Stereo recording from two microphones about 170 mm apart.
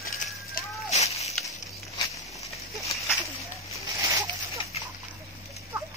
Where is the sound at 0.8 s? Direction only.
40° left (ahead or behind).